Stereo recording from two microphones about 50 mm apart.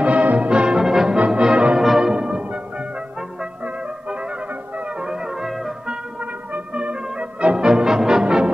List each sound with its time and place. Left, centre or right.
0.0 s music: right
0.5 s music: centre
1.4 s music: right
1.8 s brass instrument: centre
2.1 s music: centre
5.0 s music: centre
6.5 s brass instrument: right